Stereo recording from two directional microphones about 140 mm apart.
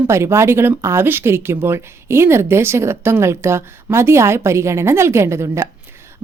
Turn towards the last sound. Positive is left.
turn(degrees=-20)  # may be behind; listen again after turning